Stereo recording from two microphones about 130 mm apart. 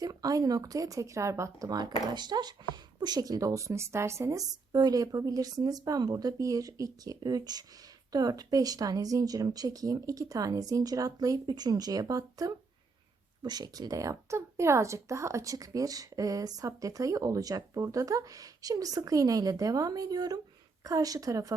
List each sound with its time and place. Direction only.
0.0 s speech: 30° right (ahead or behind)